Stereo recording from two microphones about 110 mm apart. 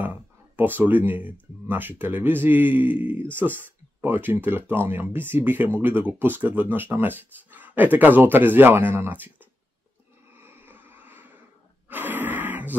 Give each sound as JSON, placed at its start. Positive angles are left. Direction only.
{"t": 0.0, "sound": "speech", "side_deg": -15}
{"t": 10.3, "sound": "a sound", "side_deg": -20}
{"t": 11.9, "sound": "gasp", "side_deg": -15}